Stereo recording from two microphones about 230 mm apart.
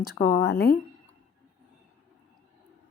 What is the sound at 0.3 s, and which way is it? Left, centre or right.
Speech, left.